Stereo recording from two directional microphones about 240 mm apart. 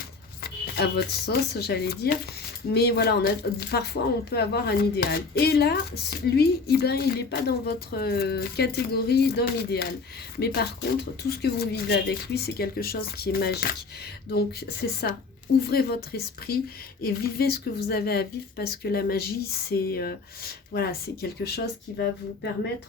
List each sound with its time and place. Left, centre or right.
0.4 s speech: left